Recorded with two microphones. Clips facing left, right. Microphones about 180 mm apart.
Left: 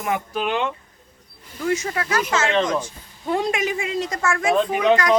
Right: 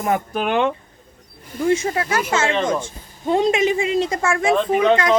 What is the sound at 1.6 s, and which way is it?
Speech, 30° right (ahead or behind).